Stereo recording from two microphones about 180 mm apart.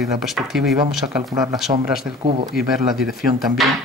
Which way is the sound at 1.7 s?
30° right (ahead or behind).